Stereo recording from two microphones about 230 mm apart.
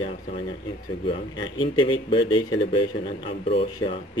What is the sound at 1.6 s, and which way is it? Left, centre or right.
Speech, left.